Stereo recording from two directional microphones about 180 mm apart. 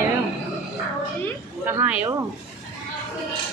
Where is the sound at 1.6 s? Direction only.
10° right (ahead or behind).